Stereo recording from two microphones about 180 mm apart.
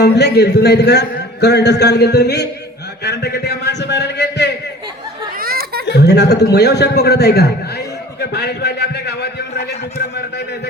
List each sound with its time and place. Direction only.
0.0 s a man's voice: 65° left (ahead or behind)
5.4 s a sound: 55° right (ahead or behind)
5.8 s a man's voice: 70° left (ahead or behind)